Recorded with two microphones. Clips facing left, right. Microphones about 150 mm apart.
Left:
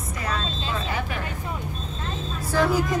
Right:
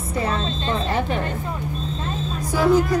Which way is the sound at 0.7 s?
30° right (ahead or behind).